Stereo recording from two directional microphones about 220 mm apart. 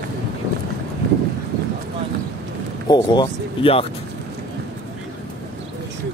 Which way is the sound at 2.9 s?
20° left (ahead or behind).